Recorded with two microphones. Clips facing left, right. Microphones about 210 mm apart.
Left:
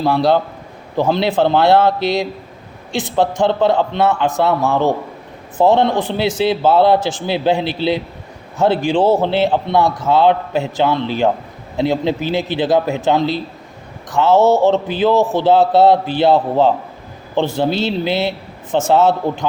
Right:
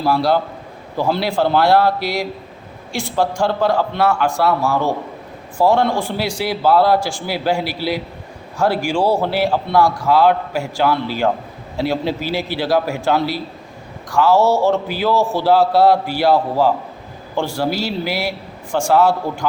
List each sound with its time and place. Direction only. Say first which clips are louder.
0.0 s a man's voice: left 2 dB; 20° left (ahead or behind)